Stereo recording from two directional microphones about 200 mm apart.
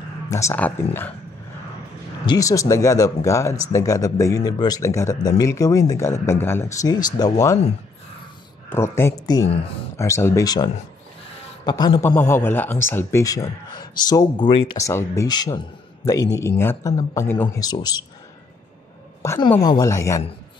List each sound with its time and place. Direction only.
0.3 s speech: 15° left (ahead or behind)
2.2 s speech: 15° left (ahead or behind)
8.6 s a man's voice: 10° left (ahead or behind)
14.8 s speech: 15° left (ahead or behind)
19.2 s speech: 15° left (ahead or behind)